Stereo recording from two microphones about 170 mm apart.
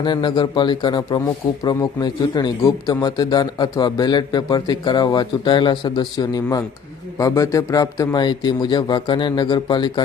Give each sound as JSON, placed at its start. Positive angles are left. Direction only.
{"t": 0.0, "sound": "a man's voice", "side_deg": 25}